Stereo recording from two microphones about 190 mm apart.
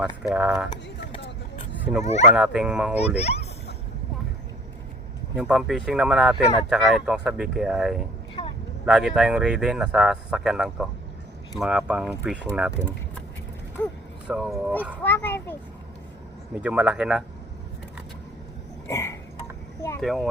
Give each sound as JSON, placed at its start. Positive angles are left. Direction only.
{"t": 0.0, "sound": "speech", "side_deg": -5}
{"t": 1.8, "sound": "speech", "side_deg": -10}
{"t": 3.2, "sound": "a sound", "side_deg": 35}
{"t": 5.4, "sound": "speech", "side_deg": -5}
{"t": 8.4, "sound": "vehicle", "side_deg": 20}
{"t": 8.9, "sound": "speech", "side_deg": 0}
{"t": 13.8, "sound": "a child's voice", "side_deg": 10}
{"t": 15.0, "sound": "a child's voice", "side_deg": 10}
{"t": 16.6, "sound": "speech", "side_deg": -5}
{"t": 18.9, "sound": "a sound", "side_deg": 15}
{"t": 20.0, "sound": "speech", "side_deg": 0}